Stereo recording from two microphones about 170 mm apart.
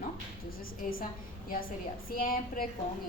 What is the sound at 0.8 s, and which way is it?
Speech, 55° left (ahead or behind).